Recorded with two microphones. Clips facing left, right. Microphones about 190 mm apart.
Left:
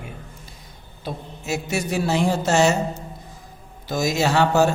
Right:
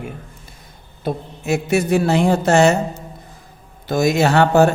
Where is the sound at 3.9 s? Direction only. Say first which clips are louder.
Right 5 dB; 60° right (ahead or behind).